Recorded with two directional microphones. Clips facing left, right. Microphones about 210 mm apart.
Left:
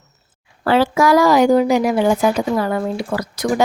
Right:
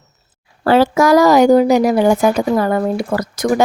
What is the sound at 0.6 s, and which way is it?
Speech, 40° right (ahead or behind).